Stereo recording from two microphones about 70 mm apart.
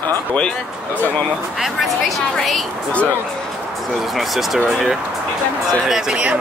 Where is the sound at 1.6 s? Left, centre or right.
Centre.